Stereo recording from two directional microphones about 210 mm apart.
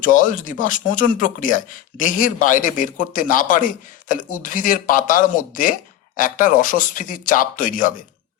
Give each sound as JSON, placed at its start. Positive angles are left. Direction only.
{"t": 0.0, "sound": "a man's voice", "side_deg": 40}